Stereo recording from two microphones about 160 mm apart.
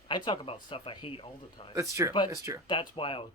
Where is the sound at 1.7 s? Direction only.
20° right (ahead or behind).